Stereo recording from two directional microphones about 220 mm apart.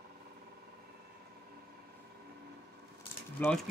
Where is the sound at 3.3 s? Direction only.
5° left (ahead or behind).